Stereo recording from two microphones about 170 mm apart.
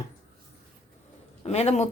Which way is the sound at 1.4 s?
40° left (ahead or behind).